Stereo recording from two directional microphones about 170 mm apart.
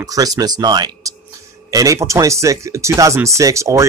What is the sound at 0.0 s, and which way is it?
Speech, 20° right (ahead or behind).